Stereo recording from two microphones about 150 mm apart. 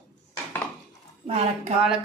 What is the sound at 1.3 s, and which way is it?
Speech, 45° right (ahead or behind).